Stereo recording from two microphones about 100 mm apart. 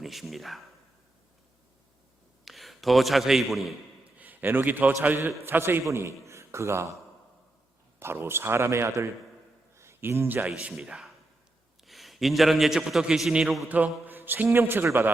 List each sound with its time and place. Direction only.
0.0 s speech: centre (ahead or behind)
2.4 s a man's voice: centre (ahead or behind)
4.2 s a man's voice: 15° right (ahead or behind)
6.2 s a sound: 30° right (ahead or behind)
7.9 s a man's voice: 25° right (ahead or behind)
10.6 s a man's voice: 5° right (ahead or behind)
13.7 s a man's voice: 15° right (ahead or behind)